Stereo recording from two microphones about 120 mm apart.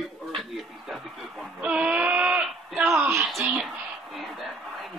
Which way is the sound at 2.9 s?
20° right (ahead or behind).